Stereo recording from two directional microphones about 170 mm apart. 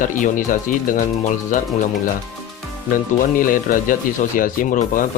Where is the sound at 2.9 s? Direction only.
55° left (ahead or behind).